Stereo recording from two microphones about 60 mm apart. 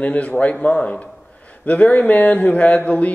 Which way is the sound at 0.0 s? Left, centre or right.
Left.